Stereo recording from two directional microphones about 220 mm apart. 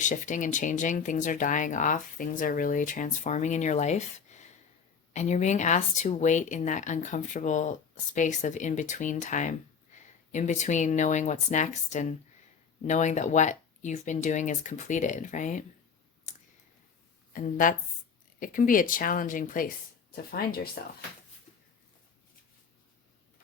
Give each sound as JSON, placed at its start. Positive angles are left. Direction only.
{"t": 0.0, "sound": "speech", "side_deg": 35}
{"t": 16.3, "sound": "clicking", "side_deg": 35}
{"t": 17.3, "sound": "speech", "side_deg": 35}